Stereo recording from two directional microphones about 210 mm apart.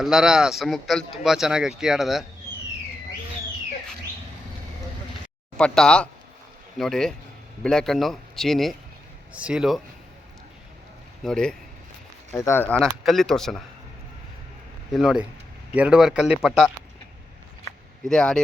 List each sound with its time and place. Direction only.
0.0 s speech: centre (ahead or behind)
5.5 s speech: 5° left (ahead or behind)
11.2 s speech: 5° left (ahead or behind)
14.9 s speech: centre (ahead or behind)
18.1 s speech: 5° left (ahead or behind)